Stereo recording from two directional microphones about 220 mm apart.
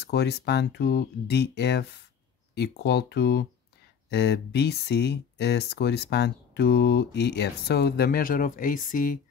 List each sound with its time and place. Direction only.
0.0 s speech: 50° left (ahead or behind)